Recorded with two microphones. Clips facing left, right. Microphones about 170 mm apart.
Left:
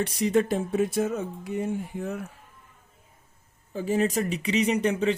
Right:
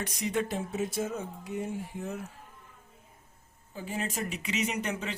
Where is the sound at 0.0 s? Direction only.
30° left (ahead or behind); by 2.2 s 60° left (ahead or behind).